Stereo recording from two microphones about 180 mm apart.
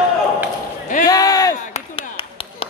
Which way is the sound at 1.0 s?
20° left (ahead or behind).